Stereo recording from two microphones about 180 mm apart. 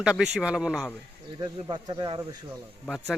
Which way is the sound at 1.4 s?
25° right (ahead or behind).